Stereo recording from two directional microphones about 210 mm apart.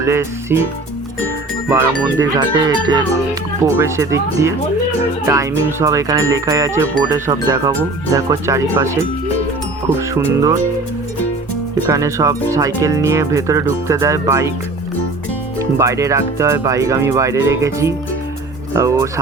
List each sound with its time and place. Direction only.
0.0 s speech: 10° right (ahead or behind)
1.7 s speech: 15° right (ahead or behind)
10.0 s speech: 15° right (ahead or behind)
11.9 s speech: 15° right (ahead or behind)
15.5 s speech: 15° right (ahead or behind)